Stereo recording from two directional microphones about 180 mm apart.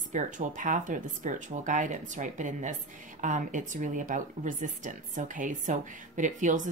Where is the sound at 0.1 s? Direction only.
45° right (ahead or behind).